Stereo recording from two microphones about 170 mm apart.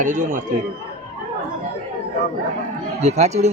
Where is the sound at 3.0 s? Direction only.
40° right (ahead or behind).